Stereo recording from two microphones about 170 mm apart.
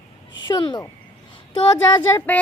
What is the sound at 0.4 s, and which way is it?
Speech, 25° left (ahead or behind).